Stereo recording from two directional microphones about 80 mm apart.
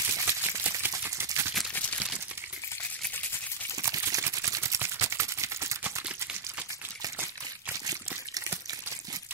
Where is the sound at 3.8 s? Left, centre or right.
Right.